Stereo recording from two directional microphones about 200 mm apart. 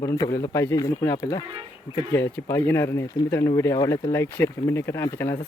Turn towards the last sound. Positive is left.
turn(degrees=15)  # may be behind; listen again after turning